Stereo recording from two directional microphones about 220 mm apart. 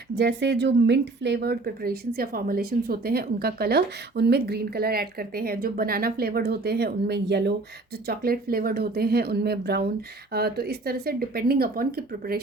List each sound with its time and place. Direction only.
0.2 s a woman's voice: 50° right (ahead or behind)